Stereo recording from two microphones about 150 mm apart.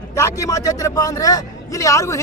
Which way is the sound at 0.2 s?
20° left (ahead or behind).